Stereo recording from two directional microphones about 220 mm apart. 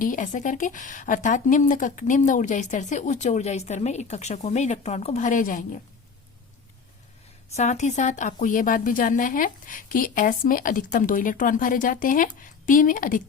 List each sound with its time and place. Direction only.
0.0 s a woman's voice: 35° left (ahead or behind)
7.5 s a woman's voice: 30° left (ahead or behind)